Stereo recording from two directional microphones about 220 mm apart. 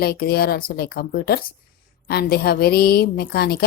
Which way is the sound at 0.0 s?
45° left (ahead or behind).